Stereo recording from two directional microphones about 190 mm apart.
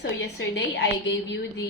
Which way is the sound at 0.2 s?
65° left (ahead or behind).